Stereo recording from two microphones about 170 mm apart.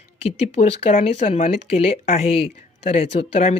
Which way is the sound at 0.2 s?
35° left (ahead or behind).